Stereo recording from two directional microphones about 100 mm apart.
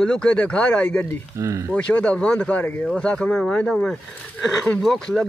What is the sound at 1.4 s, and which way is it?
Speech, 30° right (ahead or behind).